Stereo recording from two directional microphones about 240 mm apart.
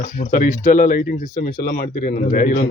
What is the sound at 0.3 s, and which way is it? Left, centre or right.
A man's voice, left.